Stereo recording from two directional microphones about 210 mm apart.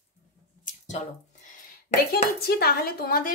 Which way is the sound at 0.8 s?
35° left (ahead or behind).